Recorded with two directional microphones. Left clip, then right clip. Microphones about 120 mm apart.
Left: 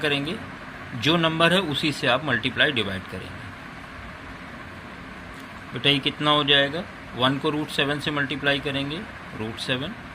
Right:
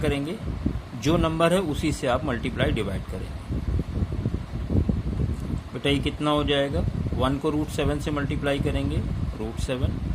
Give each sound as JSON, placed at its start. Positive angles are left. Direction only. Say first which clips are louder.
{"t": 0.0, "sound": "speech", "louder": "left 3 dB", "side_deg": -25}
{"t": 5.8, "sound": "speech", "louder": "left 4 dB", "side_deg": -25}